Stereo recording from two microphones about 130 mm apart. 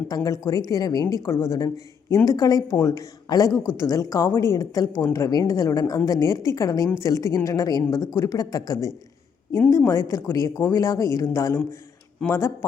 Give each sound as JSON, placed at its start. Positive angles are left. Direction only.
{"t": 0.1, "sound": "a woman's voice", "side_deg": 25}